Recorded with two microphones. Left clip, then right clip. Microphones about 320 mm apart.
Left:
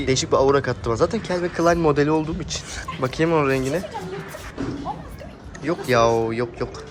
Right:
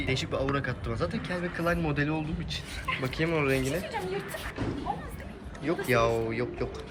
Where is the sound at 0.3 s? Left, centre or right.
Centre.